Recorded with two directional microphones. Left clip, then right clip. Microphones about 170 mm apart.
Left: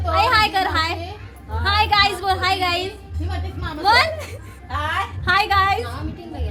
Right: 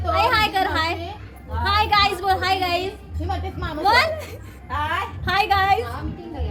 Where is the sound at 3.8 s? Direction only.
10° left (ahead or behind).